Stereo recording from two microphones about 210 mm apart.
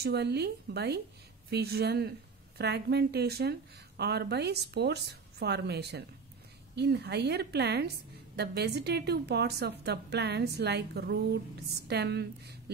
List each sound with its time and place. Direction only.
0.0 s a woman's voice: 50° right (ahead or behind)